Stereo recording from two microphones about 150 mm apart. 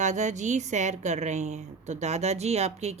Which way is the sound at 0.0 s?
50° right (ahead or behind).